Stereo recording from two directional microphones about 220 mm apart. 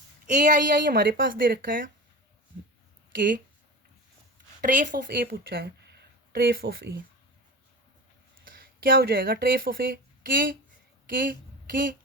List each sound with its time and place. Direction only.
0.3 s a woman's voice: 35° right (ahead or behind)
3.2 s a woman's voice: 40° right (ahead or behind)
4.6 s a woman's voice: 35° right (ahead or behind)
8.4 s speech: 40° right (ahead or behind)